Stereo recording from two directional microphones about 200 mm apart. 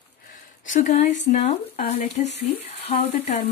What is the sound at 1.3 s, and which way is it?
Speech, 35° left (ahead or behind).